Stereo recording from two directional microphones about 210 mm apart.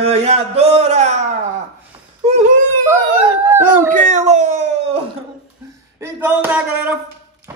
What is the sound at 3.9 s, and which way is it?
Speech, 35° right (ahead or behind).